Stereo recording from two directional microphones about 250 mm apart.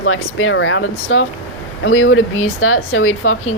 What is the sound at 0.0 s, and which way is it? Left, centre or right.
A woman's voice, left.